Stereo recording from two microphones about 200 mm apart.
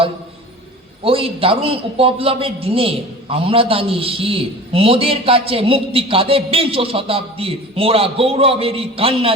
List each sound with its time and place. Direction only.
1.0 s a man's voice: 30° right (ahead or behind)